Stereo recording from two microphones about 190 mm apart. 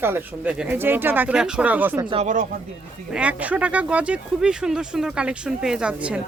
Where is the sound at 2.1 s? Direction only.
40° right (ahead or behind).